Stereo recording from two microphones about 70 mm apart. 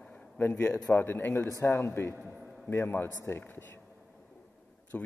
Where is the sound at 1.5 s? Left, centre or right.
Left.